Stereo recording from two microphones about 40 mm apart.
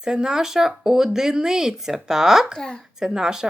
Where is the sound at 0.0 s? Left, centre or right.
Centre.